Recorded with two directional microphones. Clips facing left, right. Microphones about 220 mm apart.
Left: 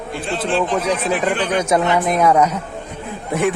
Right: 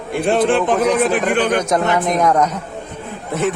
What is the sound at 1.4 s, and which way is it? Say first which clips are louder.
A man's voice: even; 10° left (ahead or behind).